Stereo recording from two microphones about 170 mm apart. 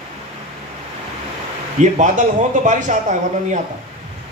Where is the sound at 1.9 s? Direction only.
45° right (ahead or behind).